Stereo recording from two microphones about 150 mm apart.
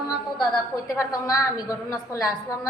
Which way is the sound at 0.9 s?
20° left (ahead or behind).